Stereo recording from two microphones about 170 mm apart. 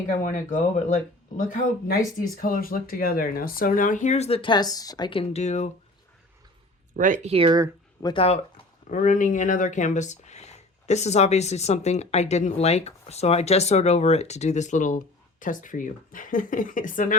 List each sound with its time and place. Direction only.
0.2 s speech: 45° left (ahead or behind)
6.9 s speech: 50° right (ahead or behind); by 7.7 s 25° right (ahead or behind)
8.0 s speech: 35° left (ahead or behind)
8.9 s speech: 50° left (ahead or behind)